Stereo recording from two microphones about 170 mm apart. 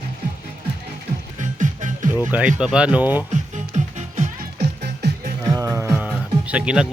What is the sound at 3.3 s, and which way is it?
Music, 45° right (ahead or behind).